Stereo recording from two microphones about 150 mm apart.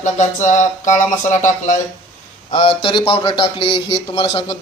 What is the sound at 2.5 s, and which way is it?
A man's voice, 35° left (ahead or behind).